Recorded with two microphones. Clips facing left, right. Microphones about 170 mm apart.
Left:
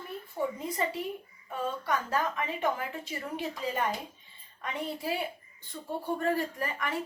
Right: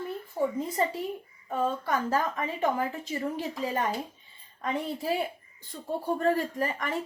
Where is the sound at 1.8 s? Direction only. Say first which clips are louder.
Right 3 dB; 40° right (ahead or behind).